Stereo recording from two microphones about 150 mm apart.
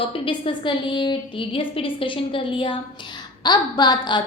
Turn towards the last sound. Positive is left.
turn(degrees=30)  # may be behind; listen again after turning